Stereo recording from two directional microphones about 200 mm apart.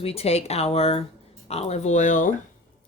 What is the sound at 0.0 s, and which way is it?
Speech, 30° left (ahead or behind).